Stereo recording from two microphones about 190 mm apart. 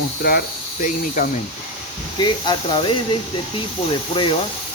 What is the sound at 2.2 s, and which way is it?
Speech, 25° left (ahead or behind).